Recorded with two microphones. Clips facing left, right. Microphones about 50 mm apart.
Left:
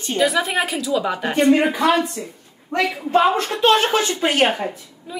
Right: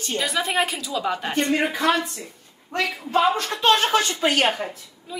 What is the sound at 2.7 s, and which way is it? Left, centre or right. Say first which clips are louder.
Speech: left 5 dB; left.